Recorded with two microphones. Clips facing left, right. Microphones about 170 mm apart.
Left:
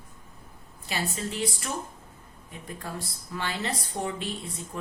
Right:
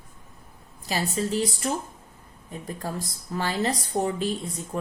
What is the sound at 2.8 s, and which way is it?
A woman's voice, 40° right (ahead or behind).